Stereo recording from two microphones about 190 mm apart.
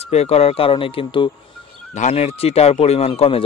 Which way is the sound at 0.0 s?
35° left (ahead or behind).